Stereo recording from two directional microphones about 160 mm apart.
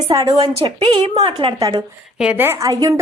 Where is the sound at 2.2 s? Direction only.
10° right (ahead or behind).